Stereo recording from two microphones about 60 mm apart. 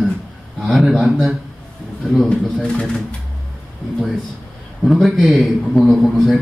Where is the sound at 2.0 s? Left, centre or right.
Centre.